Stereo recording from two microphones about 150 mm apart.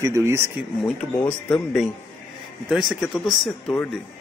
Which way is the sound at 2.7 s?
5° right (ahead or behind).